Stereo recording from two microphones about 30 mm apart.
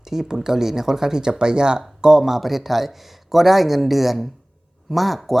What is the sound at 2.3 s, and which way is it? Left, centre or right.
Speech, centre.